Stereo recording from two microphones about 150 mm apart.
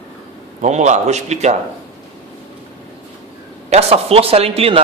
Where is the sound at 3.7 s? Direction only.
45° right (ahead or behind).